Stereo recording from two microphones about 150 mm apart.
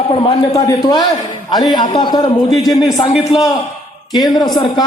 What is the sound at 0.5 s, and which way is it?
A man's voice, 25° left (ahead or behind).